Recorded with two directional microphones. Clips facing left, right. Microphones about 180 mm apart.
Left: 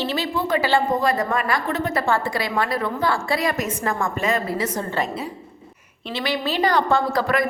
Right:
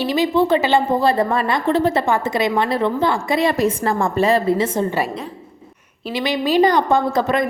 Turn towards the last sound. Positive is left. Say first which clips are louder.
# right 3 dB
turn(degrees=-20)  # may be behind; listen again after turning